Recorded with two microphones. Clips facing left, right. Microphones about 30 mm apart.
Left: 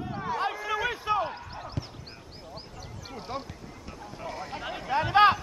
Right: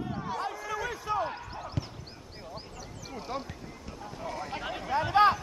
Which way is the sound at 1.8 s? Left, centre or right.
Centre.